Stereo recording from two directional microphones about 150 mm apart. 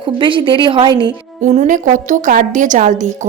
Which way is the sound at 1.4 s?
55° right (ahead or behind).